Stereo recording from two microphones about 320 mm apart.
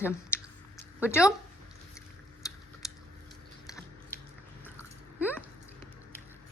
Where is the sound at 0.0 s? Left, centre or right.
Centre.